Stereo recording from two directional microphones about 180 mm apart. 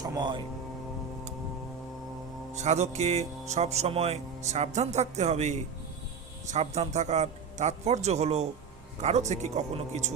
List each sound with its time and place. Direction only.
0.0 s speech: 25° right (ahead or behind)
2.6 s speech: 40° right (ahead or behind)